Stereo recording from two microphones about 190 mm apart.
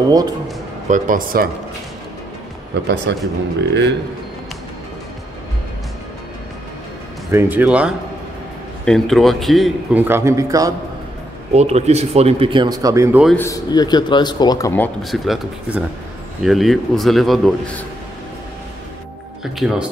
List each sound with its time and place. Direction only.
0.8 s speech: 40° right (ahead or behind)
2.7 s speech: 70° right (ahead or behind)
7.2 s a man's voice: 10° right (ahead or behind)
10.0 s a man's voice: 15° right (ahead or behind)
11.5 s speech: 35° right (ahead or behind); by 13.2 s 15° right (ahead or behind)
13.4 s a man's voice: 20° left (ahead or behind)
14.7 s speech: 10° left (ahead or behind)
15.2 s a man's voice: centre (ahead or behind)
19.6 s a man's voice: 5° right (ahead or behind)